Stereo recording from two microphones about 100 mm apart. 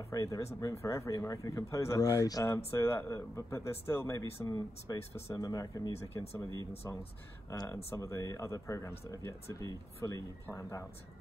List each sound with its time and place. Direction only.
0.1 s speech: 35° left (ahead or behind)
7.5 s speech: 35° left (ahead or behind)